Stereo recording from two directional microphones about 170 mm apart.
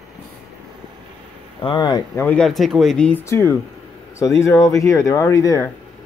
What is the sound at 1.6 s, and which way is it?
Speech, 25° left (ahead or behind).